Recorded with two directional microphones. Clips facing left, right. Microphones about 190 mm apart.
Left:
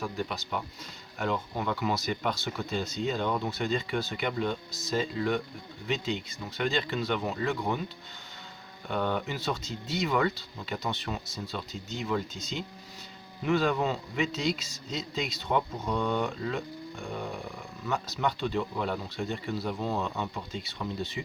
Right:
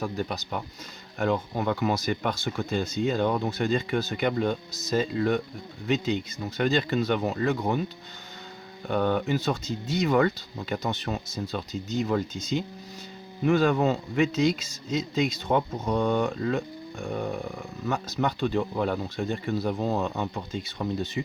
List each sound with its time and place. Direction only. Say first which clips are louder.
0.0 s a man's voice: right 3 dB; 40° right (ahead or behind)
8.9 s a man's voice: right 6 dB; 45° right (ahead or behind)
13.4 s a man's voice: right 5 dB; 45° right (ahead or behind)